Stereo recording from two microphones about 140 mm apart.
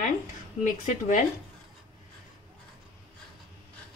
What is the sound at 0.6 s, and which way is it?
Speech, 65° left (ahead or behind).